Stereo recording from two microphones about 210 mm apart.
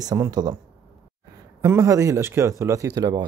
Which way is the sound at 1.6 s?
15° right (ahead or behind).